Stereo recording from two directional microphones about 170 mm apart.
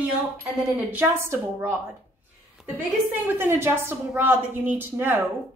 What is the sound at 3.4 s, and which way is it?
A woman's voice, 15° right (ahead or behind).